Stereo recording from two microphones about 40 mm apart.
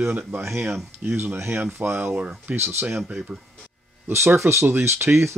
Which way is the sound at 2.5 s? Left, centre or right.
Right.